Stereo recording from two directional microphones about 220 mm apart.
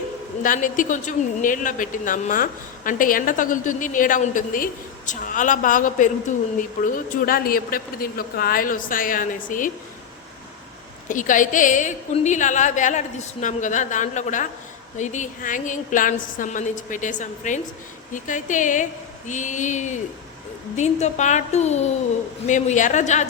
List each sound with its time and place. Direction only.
0.4 s a woman's voice: 35° left (ahead or behind)
11.1 s a woman's voice: 35° left (ahead or behind)